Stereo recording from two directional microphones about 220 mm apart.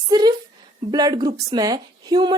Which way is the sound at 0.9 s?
20° right (ahead or behind).